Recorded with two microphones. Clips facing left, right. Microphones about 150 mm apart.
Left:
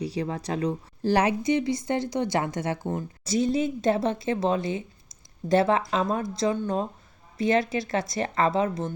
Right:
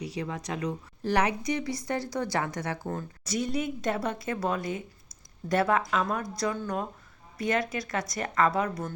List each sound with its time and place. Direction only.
0.0 s a woman's voice: 35° left (ahead or behind)